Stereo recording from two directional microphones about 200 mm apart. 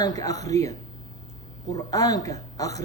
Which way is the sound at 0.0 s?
15° left (ahead or behind).